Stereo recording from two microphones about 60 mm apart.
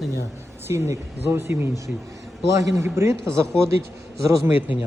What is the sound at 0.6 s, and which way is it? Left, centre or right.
Speech, right.